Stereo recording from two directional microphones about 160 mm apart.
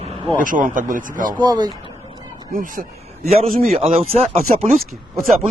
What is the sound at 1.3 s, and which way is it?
Speech, 25° right (ahead or behind).